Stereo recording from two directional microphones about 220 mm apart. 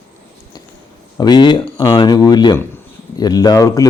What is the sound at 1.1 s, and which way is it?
Speech, 20° left (ahead or behind).